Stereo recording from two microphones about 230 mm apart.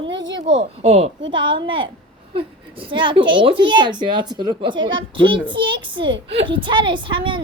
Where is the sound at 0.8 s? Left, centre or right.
Right.